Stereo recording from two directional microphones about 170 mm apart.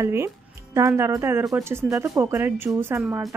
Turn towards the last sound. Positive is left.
turn(degrees=-15)  # may be behind; listen again after turning